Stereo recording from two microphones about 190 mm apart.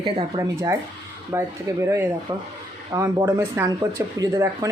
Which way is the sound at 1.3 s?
15° right (ahead or behind).